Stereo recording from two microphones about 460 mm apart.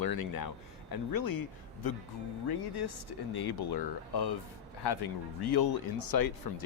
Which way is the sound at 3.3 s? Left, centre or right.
Left.